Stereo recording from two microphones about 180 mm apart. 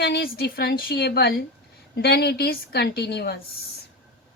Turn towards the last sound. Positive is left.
turn(degrees=65)  # may be behind; listen again after turning